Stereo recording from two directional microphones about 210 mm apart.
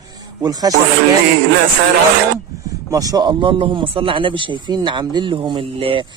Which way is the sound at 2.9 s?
15° right (ahead or behind).